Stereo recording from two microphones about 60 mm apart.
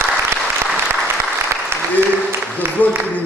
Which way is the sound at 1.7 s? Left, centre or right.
Right.